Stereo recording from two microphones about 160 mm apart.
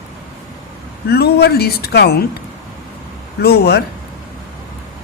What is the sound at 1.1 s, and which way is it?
Speech, 85° left.